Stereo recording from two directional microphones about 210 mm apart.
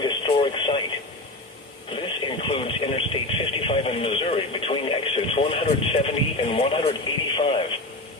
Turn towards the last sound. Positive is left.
turn(degrees=25)  # may be behind; listen again after turning